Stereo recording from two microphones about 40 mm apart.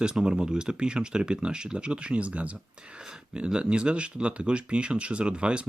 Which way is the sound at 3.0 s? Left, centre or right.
Centre.